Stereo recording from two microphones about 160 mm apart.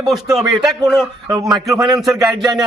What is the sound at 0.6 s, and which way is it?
Speech, 25° right (ahead or behind).